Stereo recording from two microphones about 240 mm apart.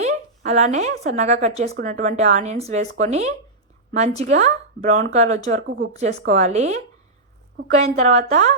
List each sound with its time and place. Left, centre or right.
0.0 s speech: right
5.6 s a woman's voice: right
6.0 s speech: right